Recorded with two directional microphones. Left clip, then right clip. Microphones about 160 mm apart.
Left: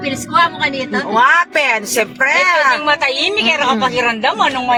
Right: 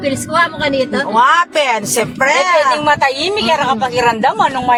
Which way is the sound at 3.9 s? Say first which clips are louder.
Right 2 dB; 50° right (ahead or behind).